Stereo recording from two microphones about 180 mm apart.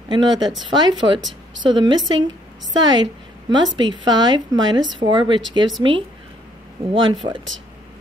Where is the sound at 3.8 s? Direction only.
25° right (ahead or behind).